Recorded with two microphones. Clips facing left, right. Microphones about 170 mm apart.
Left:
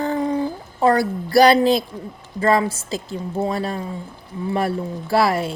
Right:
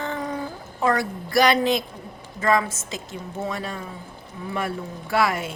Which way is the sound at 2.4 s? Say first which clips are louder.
Left 4 dB; 35° left (ahead or behind).